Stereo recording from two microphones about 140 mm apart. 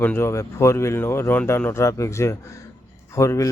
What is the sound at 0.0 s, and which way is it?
Speech, 15° left (ahead or behind).